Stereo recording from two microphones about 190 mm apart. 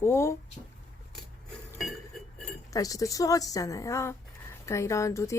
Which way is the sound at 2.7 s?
20° left (ahead or behind).